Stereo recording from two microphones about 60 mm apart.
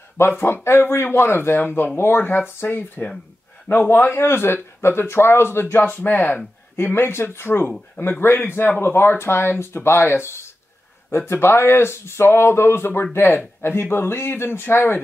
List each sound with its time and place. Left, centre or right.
0.2 s speech: left